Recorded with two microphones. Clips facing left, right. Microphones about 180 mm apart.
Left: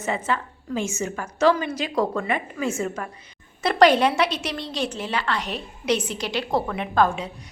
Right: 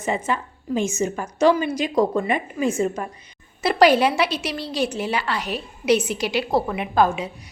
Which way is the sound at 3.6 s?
5° right (ahead or behind).